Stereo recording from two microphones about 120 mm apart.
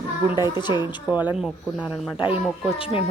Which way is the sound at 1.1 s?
15° right (ahead or behind).